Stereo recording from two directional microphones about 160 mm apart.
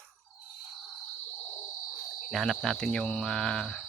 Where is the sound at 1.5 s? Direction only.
15° left (ahead or behind).